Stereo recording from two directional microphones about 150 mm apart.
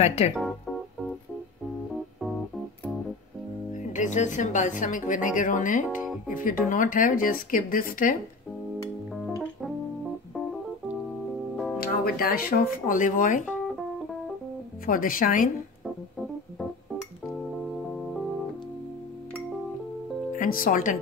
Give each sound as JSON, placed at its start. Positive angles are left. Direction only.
{"t": 0.0, "sound": "speech", "side_deg": 45}
{"t": 0.3, "sound": "music", "side_deg": 0}
{"t": 3.7, "sound": "speech", "side_deg": 55}
{"t": 9.1, "sound": "music", "side_deg": 0}
{"t": 11.8, "sound": "speech", "side_deg": 80}
{"t": 14.9, "sound": "speech", "side_deg": 70}
{"t": 20.3, "sound": "speech", "side_deg": 70}